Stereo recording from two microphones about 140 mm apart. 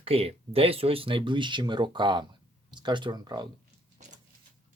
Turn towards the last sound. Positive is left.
turn(degrees=-30)  # may be behind; listen again after turning